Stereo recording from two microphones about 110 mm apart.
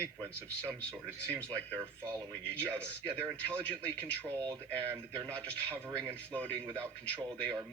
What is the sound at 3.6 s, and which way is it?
Speech, 15° left (ahead or behind).